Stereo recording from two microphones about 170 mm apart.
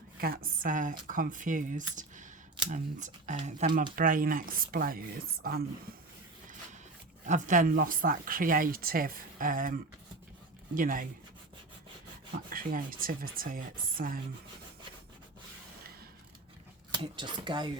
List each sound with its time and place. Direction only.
0.2 s speech: 55° right (ahead or behind)
3.9 s speech: 55° right (ahead or behind)
7.3 s speech: 45° right (ahead or behind)
12.5 s speech: 55° right (ahead or behind)
16.9 s speech: 25° right (ahead or behind)